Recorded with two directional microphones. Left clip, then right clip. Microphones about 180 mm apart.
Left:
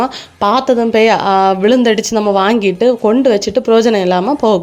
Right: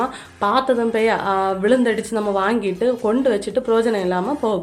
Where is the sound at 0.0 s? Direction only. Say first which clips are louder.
Left 7 dB; 40° left (ahead or behind).